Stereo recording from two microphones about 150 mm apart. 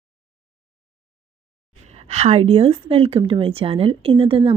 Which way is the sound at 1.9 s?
45° right (ahead or behind).